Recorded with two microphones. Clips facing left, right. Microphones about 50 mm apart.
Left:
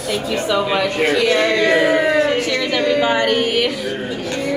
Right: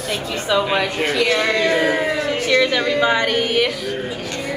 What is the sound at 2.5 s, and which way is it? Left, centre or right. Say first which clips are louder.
A woman's voice: right 1 dB; right.